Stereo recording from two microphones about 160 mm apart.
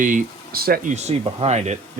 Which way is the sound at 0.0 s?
60° right (ahead or behind).